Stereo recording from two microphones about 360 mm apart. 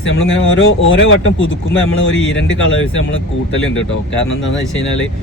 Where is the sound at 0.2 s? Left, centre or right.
Left.